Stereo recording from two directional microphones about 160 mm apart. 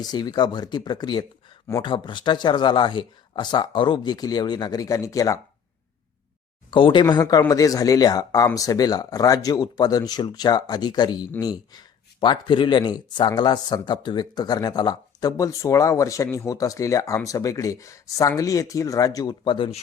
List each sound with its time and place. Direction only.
0.0 s speech: 25° left (ahead or behind)
6.7 s speech: 30° left (ahead or behind)